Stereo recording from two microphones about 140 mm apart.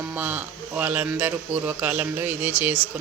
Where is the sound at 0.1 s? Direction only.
15° right (ahead or behind).